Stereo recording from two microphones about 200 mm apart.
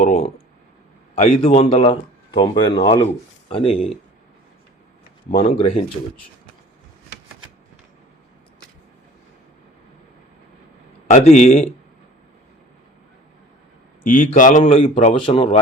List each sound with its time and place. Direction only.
0.0 s a man's voice: 30° left (ahead or behind)
5.5 s speech: 25° left (ahead or behind)
11.1 s a man's voice: 35° left (ahead or behind)
14.0 s a man's voice: 40° left (ahead or behind)
14.6 s speech: 30° left (ahead or behind)